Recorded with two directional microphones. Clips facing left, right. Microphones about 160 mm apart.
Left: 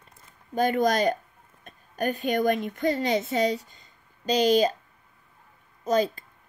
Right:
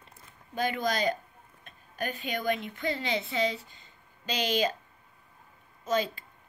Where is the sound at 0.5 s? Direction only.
45° left (ahead or behind).